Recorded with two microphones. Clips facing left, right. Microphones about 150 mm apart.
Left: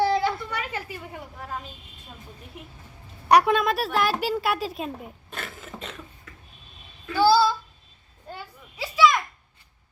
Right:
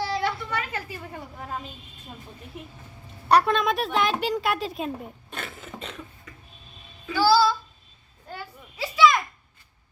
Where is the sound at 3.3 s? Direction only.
10° left (ahead or behind).